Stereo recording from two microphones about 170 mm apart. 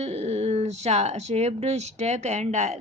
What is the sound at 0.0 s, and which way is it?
Speech, 40° right (ahead or behind).